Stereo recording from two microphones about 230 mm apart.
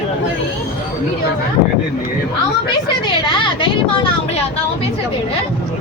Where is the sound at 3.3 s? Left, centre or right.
Left.